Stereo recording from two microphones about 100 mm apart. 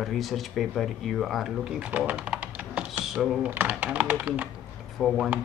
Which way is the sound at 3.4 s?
20° right (ahead or behind).